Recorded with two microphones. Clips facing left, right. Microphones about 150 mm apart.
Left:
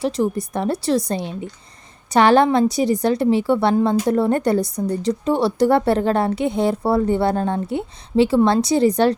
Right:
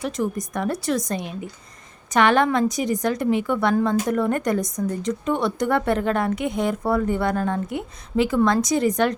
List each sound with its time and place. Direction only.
0.0 s a woman's voice: 30° left (ahead or behind)